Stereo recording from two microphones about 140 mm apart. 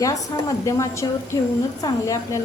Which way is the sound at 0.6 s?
25° left (ahead or behind).